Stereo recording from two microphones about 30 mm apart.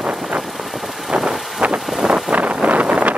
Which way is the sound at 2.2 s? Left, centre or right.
Right.